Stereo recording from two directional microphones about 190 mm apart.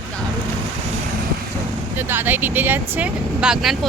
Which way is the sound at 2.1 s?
10° right (ahead or behind).